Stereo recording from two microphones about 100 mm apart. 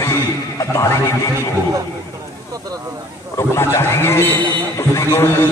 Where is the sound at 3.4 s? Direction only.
25° left (ahead or behind).